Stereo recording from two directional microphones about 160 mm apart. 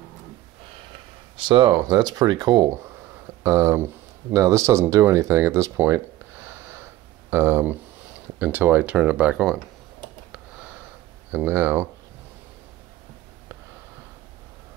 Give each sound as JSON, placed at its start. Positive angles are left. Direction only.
{"t": 0.9, "sound": "speech", "side_deg": -35}
{"t": 11.3, "sound": "speech", "side_deg": -15}